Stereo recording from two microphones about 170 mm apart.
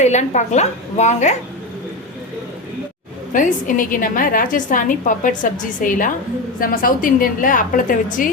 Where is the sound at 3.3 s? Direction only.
55° left (ahead or behind).